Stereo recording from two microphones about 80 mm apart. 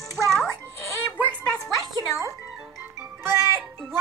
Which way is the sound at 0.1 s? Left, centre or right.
Centre.